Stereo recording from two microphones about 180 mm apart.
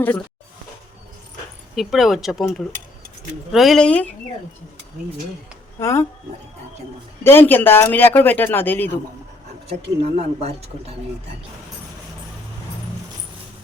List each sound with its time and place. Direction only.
1.7 s speech: centre (ahead or behind)
5.8 s speech: 15° left (ahead or behind)
7.3 s speech: 10° left (ahead or behind)
10.2 s speech: 35° right (ahead or behind)